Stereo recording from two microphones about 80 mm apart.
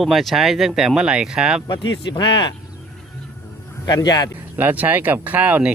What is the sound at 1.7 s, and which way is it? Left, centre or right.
Speech, left.